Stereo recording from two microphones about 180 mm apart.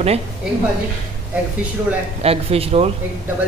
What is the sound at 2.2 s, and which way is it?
Speech, 35° right (ahead or behind).